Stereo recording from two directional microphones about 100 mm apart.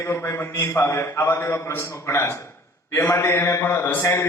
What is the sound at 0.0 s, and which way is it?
A man's voice, 30° left (ahead or behind).